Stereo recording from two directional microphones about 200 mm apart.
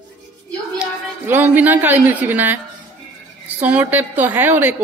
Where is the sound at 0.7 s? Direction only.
10° right (ahead or behind).